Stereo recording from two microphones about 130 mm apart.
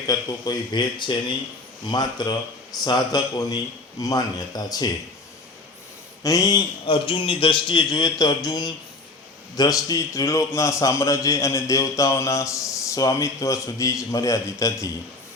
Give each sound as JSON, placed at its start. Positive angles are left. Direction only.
{"t": 0.1, "sound": "a man's voice", "side_deg": 30}
{"t": 6.2, "sound": "a man's voice", "side_deg": 25}
{"t": 6.8, "sound": "a man's voice", "side_deg": 40}